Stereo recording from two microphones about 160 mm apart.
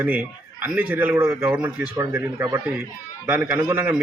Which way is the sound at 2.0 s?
20° right (ahead or behind).